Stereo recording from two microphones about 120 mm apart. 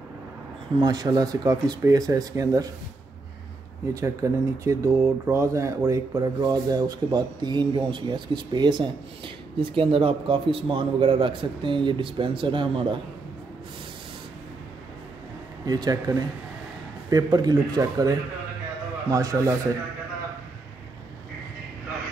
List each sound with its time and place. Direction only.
0.7 s speech: 35° right (ahead or behind)
3.9 s speech: 25° right (ahead or behind); by 12.8 s 45° right (ahead or behind)
15.6 s speech: 35° right (ahead or behind)